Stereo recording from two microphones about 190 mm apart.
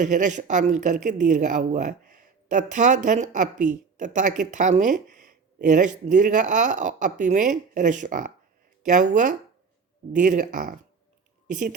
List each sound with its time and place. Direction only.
0.0 s a woman's voice: 40° right (ahead or behind)